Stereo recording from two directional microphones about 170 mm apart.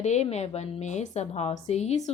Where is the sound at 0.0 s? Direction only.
40° left (ahead or behind).